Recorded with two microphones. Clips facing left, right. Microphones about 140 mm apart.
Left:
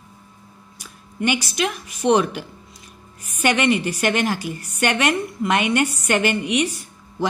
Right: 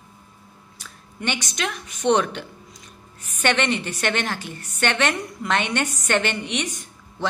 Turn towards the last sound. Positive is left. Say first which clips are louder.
# left 5 dB
turn(degrees=10)  # may be behind; listen again after turning